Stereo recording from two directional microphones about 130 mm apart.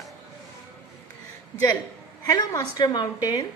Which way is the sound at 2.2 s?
30° left (ahead or behind).